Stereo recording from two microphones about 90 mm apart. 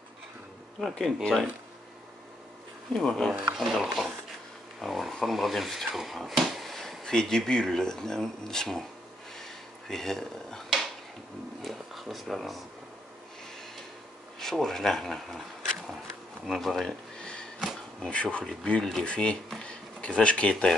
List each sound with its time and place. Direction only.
0.7 s speech: centre (ahead or behind)
2.9 s speech: 5° left (ahead or behind)
9.4 s a sound: 5° left (ahead or behind)
11.6 s speech: centre (ahead or behind)
14.4 s speech: 5° left (ahead or behind)
16.4 s a sound: centre (ahead or behind)
17.6 s insect: 10° left (ahead or behind)
18.4 s speech: 5° left (ahead or behind)